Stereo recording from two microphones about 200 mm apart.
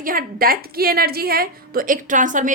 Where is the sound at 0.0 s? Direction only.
45° right (ahead or behind).